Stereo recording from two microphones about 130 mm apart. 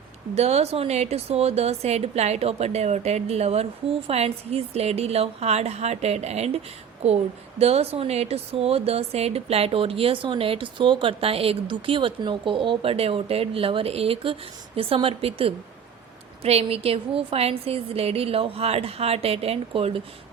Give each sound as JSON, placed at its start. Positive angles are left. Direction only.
{"t": 0.3, "sound": "a woman's voice", "side_deg": -55}
{"t": 7.6, "sound": "a woman's voice", "side_deg": -50}